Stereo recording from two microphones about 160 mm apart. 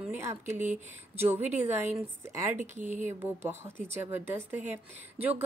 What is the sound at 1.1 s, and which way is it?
Speech, 15° right (ahead or behind).